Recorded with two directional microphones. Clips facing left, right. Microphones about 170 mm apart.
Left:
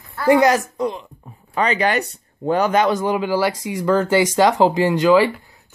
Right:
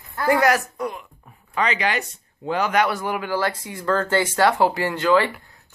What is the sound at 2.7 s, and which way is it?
Speech, 20° left (ahead or behind).